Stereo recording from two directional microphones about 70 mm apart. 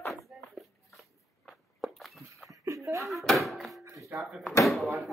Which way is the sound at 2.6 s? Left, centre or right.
Right.